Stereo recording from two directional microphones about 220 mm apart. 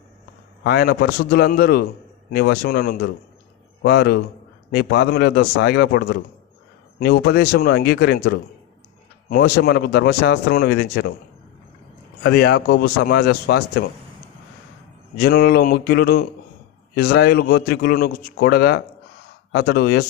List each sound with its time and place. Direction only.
0.6 s speech: 45° left (ahead or behind)
12.2 s speech: 45° left (ahead or behind)
15.2 s speech: 45° left (ahead or behind)